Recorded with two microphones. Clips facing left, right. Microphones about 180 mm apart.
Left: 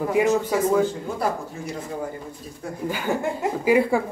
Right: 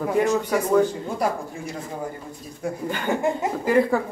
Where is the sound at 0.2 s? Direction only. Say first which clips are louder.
Left 1 dB; 10° left (ahead or behind).